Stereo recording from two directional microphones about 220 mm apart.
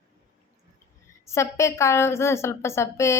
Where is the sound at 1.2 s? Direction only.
10° left (ahead or behind).